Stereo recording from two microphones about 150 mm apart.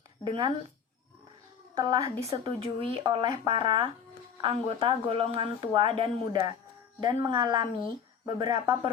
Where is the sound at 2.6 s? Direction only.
35° right (ahead or behind).